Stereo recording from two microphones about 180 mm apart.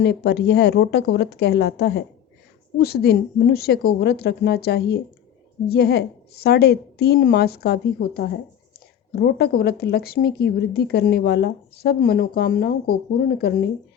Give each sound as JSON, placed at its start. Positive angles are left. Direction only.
{"t": 0.0, "sound": "a woman's voice", "side_deg": 65}